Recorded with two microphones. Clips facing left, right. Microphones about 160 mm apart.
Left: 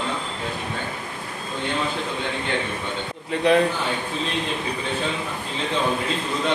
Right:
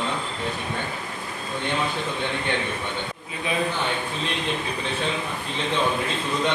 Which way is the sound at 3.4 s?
80° left.